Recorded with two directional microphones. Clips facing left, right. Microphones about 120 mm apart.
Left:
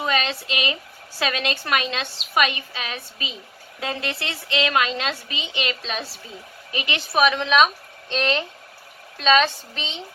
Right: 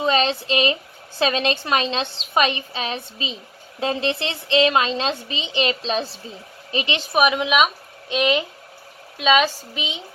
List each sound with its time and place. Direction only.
0.0 s a woman's voice: 25° right (ahead or behind); by 10.0 s 10° right (ahead or behind)